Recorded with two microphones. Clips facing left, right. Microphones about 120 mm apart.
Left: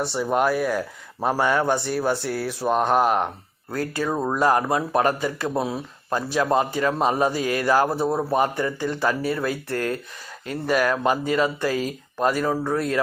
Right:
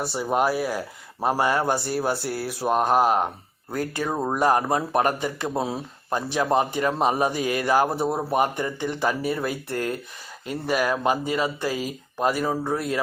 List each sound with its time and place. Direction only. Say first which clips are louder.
0.0 s speech: left 1 dB; 10° right (ahead or behind)
3.7 s speech: left 1 dB; 25° right (ahead or behind)